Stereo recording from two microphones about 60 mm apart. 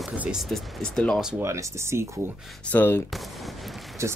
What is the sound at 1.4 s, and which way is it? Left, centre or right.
Speech, right.